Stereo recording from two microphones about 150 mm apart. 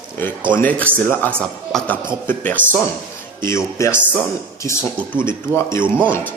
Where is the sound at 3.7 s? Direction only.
20° left (ahead or behind).